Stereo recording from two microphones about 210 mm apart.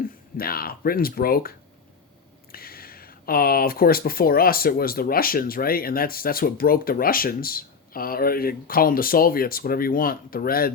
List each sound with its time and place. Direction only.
0.0 s speech: 45° left (ahead or behind)